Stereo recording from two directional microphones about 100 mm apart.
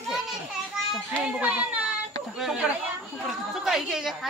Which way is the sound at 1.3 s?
10° right (ahead or behind).